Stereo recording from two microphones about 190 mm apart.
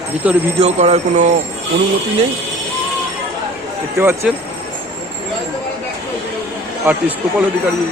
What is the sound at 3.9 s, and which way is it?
Speech, 10° right (ahead or behind).